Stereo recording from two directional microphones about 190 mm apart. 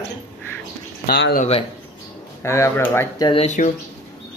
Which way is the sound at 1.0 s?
55° left (ahead or behind).